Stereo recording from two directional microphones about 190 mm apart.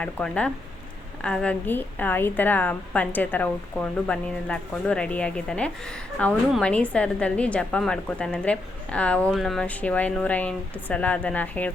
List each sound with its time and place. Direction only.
0.0 s a woman's voice: 5° left (ahead or behind)